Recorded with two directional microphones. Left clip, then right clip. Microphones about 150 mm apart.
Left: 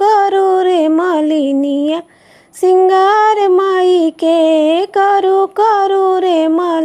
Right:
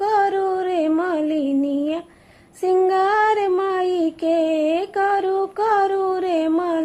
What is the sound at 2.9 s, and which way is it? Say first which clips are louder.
Female singing: left 8 dB; 50° left (ahead or behind).